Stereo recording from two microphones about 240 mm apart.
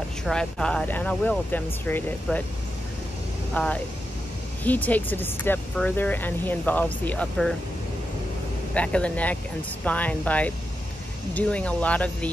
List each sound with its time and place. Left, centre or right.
0.2 s speech: centre
3.5 s speech: centre
8.7 s speech: centre